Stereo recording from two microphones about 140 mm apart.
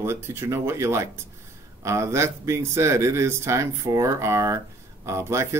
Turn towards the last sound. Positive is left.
turn(degrees=-20)  # may be behind; listen again after turning